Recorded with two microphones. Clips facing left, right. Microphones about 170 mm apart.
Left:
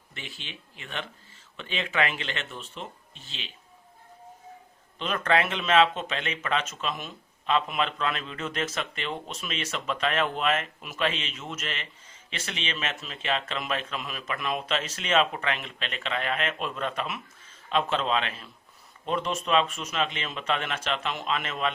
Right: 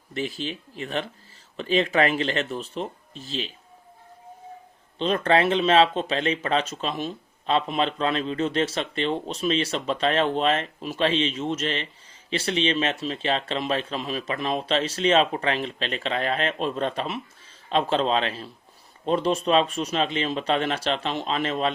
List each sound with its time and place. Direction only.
0.1 s speech: 35° right (ahead or behind)
4.9 s speech: 30° right (ahead or behind)